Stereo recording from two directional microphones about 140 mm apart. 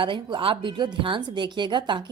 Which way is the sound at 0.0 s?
35° right (ahead or behind).